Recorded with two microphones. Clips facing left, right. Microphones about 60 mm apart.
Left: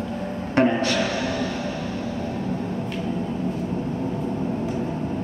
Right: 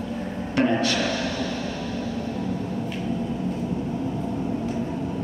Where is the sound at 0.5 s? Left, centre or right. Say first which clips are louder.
Left 2 dB; left.